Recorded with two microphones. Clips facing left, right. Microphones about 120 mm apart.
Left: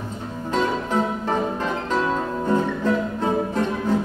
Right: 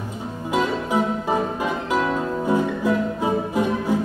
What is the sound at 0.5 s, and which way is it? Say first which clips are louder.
Music: right 1 dB; 10° right (ahead or behind).